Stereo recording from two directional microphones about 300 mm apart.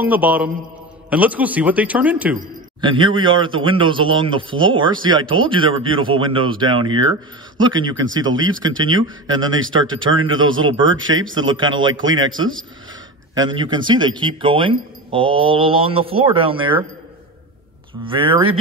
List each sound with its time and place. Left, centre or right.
0.0 s speech: centre
2.8 s speech: centre
9.8 s speech: right
11.5 s speech: centre
11.9 s speech: right
13.3 s speech: centre
18.0 s speech: centre